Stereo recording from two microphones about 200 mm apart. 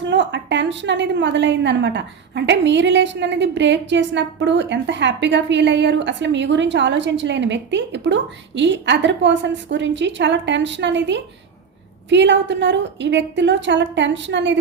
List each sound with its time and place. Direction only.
0.1 s a woman's voice: 65° right (ahead or behind)